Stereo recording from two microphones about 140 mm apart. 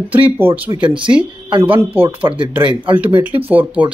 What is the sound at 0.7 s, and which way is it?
Speech, 35° right (ahead or behind).